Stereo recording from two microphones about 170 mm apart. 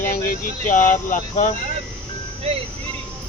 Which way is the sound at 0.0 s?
55° left (ahead or behind).